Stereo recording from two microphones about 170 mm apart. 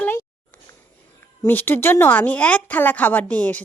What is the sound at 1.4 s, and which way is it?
Speech, 10° left (ahead or behind).